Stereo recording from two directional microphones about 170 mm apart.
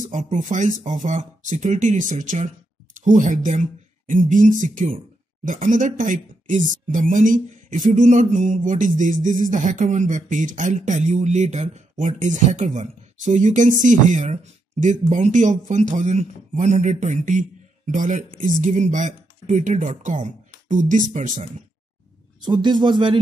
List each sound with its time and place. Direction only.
0.0 s speech: 45° right (ahead or behind)
22.4 s a man's voice: 25° right (ahead or behind)